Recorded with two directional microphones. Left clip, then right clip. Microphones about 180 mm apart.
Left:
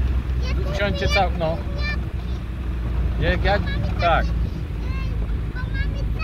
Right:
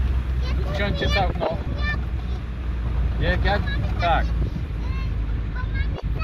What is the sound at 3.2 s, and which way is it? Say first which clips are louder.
Speech: left 2 dB; 25° left (ahead or behind).